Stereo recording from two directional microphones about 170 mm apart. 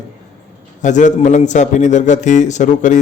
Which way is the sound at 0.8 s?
45° left (ahead or behind).